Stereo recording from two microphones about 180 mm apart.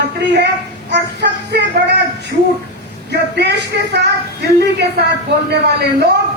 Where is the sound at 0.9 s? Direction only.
75° right (ahead or behind).